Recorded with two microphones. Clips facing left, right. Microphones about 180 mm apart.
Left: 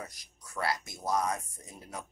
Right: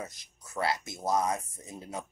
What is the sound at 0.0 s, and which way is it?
A man's voice, 25° right (ahead or behind).